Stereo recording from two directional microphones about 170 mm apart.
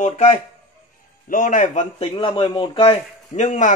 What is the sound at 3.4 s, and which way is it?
Speech, 45° left (ahead or behind).